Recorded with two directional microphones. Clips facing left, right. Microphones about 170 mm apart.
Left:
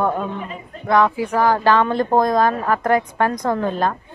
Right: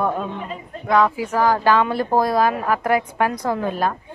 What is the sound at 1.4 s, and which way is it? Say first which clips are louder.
A woman's voice: left 1 dB; 10° right (ahead or behind).